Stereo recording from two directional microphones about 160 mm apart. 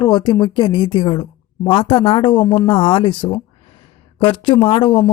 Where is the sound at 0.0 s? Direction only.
25° left (ahead or behind).